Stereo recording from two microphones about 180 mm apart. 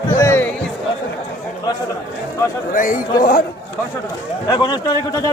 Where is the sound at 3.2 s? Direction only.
60° left (ahead or behind).